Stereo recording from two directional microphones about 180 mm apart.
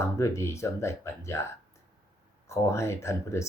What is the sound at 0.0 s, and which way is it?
Speech, 15° left (ahead or behind).